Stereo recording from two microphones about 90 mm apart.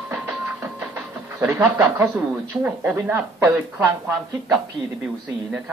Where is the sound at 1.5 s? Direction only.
30° right (ahead or behind).